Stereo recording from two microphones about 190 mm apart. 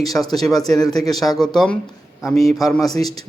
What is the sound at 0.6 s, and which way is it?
Speech, 20° left (ahead or behind).